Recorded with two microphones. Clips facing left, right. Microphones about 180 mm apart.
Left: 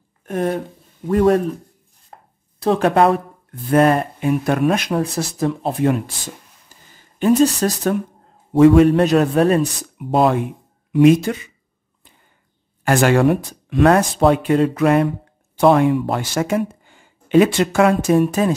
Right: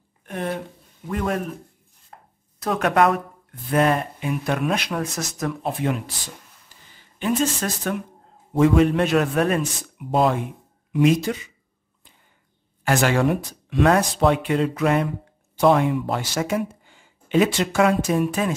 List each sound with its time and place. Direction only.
0.3 s a man's voice: 40° left (ahead or behind)
2.1 s chopping: 35° left (ahead or behind)
2.6 s speech: 30° left (ahead or behind)
3.7 s speech: 45° left (ahead or behind)
4.9 s speech: 30° left (ahead or behind)
8.5 s speech: 60° left (ahead or behind)
8.9 s a man's voice: 35° left (ahead or behind)
9.9 s speech: 65° left (ahead or behind)
10.9 s speech: 55° left (ahead or behind)
12.8 s speech: 50° left (ahead or behind)
14.7 s speech: 55° left (ahead or behind)
18.2 s a man's voice: 40° left (ahead or behind)